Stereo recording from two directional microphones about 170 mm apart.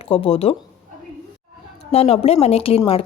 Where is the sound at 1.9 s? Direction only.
35° left (ahead or behind).